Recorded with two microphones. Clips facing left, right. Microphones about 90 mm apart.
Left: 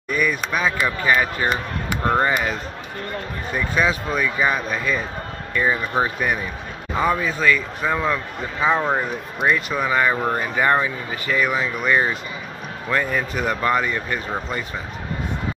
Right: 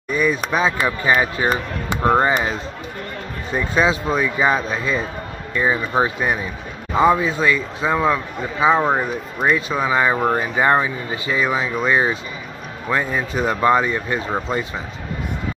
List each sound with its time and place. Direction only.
0.1 s speech: 25° right (ahead or behind)
3.5 s speech: 25° right (ahead or behind)
5.5 s speech: 15° right (ahead or behind)
12.9 s speech: 20° right (ahead or behind)